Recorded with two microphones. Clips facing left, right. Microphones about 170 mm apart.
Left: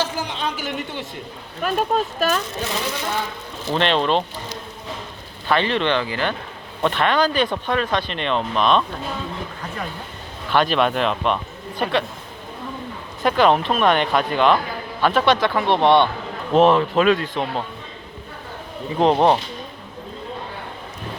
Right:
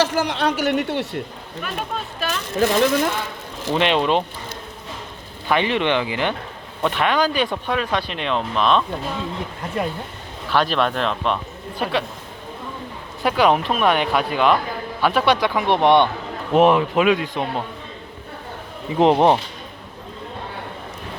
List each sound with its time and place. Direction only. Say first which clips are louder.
0.0 s a woman's voice: right 5 dB; 80° right
1.6 s speech: left 8 dB; 40° left (ahead or behind)
2.6 s speech: right 9 dB; 55° right (ahead or behind)
3.8 s speech: right 1 dB; 10° right (ahead or behind)
5.5 s speech: even; 15° right (ahead or behind)
6.8 s speech: left 1 dB; 5° right (ahead or behind)
10.5 s speech: left 1 dB; centre (ahead or behind)
13.2 s speech: left 1 dB; 5° right (ahead or behind)
18.9 s speech: right 1 dB; 15° right (ahead or behind)